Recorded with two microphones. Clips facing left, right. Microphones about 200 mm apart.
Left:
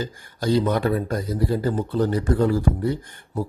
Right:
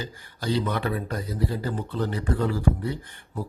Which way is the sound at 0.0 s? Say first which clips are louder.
Left 6 dB; 45° left (ahead or behind).